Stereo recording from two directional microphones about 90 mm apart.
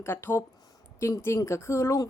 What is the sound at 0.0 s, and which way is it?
Speech, 25° left (ahead or behind).